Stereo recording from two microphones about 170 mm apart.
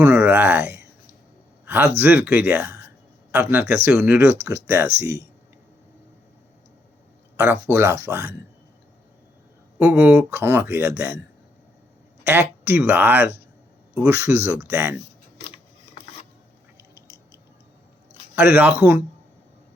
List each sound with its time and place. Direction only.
0.0 s speech: 10° right (ahead or behind)
7.3 s speech: 10° right (ahead or behind)
9.7 s speech: 5° right (ahead or behind)
12.2 s speech: 10° right (ahead or behind)
18.3 s speech: 10° right (ahead or behind)